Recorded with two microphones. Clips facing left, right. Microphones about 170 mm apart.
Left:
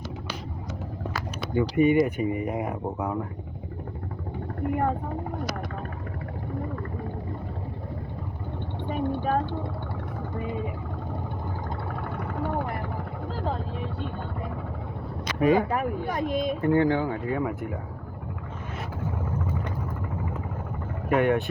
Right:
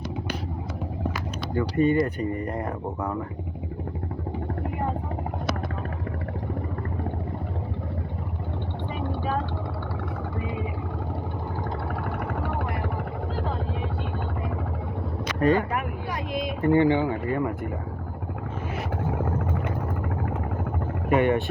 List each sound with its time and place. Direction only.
1.5 s speech: 15° left (ahead or behind)
8.9 s vehicle: 50° left (ahead or behind)
10.3 s speech: 45° left (ahead or behind)
12.0 s vehicle: 70° right (ahead or behind)
15.4 s speech: 10° left (ahead or behind)
15.7 s speech: 40° left (ahead or behind)
16.6 s speech: 70° right (ahead or behind)
16.9 s speech: centre (ahead or behind)
21.1 s speech: centre (ahead or behind)